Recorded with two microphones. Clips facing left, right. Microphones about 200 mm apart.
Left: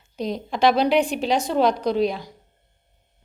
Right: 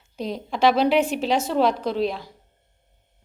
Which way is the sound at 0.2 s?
5° right (ahead or behind).